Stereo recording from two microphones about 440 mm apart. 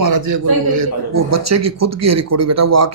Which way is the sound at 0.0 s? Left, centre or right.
Right.